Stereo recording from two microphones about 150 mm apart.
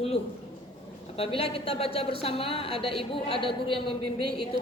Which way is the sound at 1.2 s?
40° left (ahead or behind).